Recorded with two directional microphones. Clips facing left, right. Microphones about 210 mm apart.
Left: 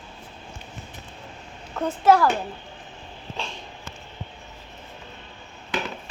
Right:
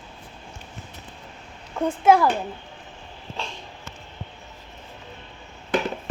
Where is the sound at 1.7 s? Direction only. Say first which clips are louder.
Right 1 dB; 10° right (ahead or behind).